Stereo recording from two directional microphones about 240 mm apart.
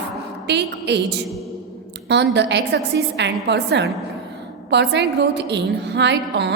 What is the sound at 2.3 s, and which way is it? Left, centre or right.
A woman's voice, right.